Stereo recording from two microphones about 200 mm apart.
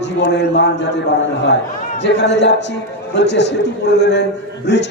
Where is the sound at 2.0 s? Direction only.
60° left (ahead or behind).